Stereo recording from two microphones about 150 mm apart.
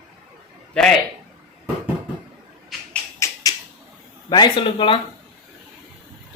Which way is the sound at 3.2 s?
25° left (ahead or behind).